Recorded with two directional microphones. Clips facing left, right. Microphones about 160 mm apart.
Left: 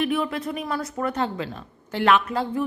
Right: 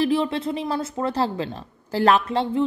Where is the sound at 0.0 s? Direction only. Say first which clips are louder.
Right 3 dB; 30° right (ahead or behind).